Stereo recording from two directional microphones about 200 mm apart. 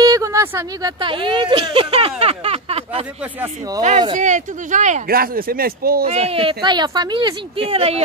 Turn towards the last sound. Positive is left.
turn(degrees=-30)  # may be behind; listen again after turning